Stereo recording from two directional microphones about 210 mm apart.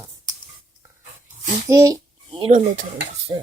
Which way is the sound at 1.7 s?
15° right (ahead or behind).